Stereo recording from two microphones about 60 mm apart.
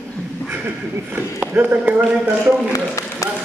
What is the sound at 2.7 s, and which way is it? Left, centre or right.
Speech, left.